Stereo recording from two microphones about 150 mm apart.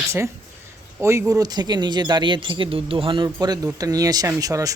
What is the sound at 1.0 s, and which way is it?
Speech, 20° right (ahead or behind).